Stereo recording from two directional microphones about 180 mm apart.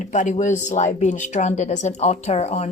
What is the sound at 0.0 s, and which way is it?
Speech, 40° left (ahead or behind).